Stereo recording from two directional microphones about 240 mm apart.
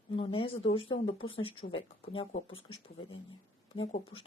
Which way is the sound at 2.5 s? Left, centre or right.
Left.